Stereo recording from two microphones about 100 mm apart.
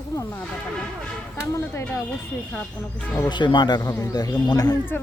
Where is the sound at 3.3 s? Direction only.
50° left (ahead or behind).